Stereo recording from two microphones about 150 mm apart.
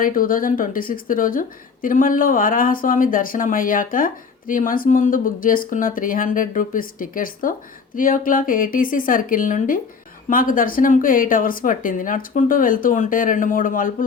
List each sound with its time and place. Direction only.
0.0 s a woman's voice: 70° left (ahead or behind)